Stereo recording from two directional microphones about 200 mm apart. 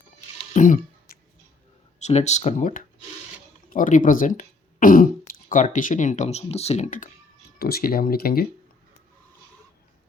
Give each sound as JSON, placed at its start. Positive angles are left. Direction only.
{"t": 0.5, "sound": "throat clearing", "side_deg": 40}
{"t": 2.0, "sound": "speech", "side_deg": 35}
{"t": 7.6, "sound": "speech", "side_deg": 50}